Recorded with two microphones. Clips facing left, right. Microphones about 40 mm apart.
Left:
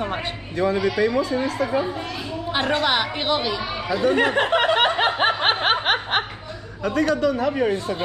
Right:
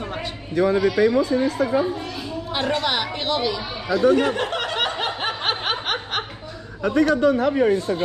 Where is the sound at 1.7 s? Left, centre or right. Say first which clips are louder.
Right 2 dB; centre.